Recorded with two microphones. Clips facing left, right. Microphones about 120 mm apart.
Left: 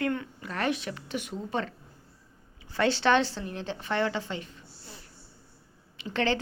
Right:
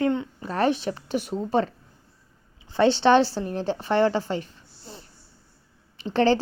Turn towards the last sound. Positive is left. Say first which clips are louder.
# right 8 dB
turn(degrees=-35)  # may be behind; listen again after turning